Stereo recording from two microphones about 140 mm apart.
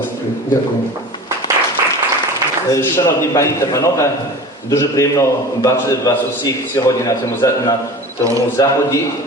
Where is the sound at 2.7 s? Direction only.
20° left (ahead or behind).